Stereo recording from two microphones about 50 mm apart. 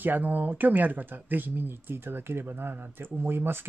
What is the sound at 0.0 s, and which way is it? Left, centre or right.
Speech, right.